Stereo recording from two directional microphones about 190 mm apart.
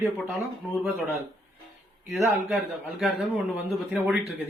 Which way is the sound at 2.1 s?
Centre (ahead or behind).